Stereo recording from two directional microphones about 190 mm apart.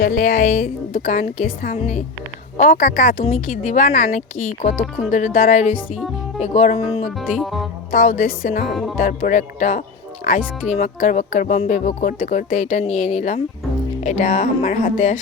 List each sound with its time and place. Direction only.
0.0 s speech: 45° left (ahead or behind)
3.2 s speech: 35° left (ahead or behind)
7.2 s speech: centre (ahead or behind)
7.9 s speech: 45° left (ahead or behind)